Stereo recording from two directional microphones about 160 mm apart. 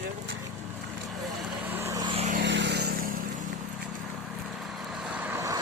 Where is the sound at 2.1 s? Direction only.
40° right (ahead or behind).